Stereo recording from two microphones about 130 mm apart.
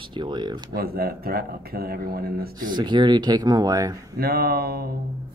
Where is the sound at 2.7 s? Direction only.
35° right (ahead or behind).